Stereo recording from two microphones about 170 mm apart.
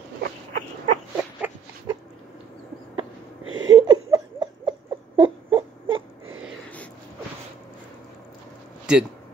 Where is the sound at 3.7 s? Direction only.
25° right (ahead or behind).